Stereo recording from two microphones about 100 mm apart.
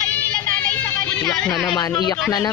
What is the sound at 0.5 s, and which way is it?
Music, 20° left (ahead or behind).